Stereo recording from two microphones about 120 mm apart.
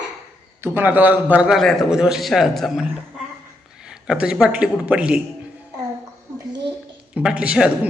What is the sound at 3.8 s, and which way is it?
Speech, 5° right (ahead or behind).